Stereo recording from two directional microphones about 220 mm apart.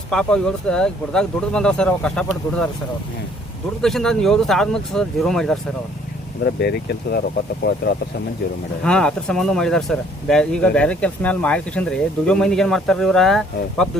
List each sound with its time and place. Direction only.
0.1 s speech: 5° left (ahead or behind)
3.8 s speech: centre (ahead or behind)
6.4 s speech: 50° left (ahead or behind)
8.8 s speech: 5° left (ahead or behind)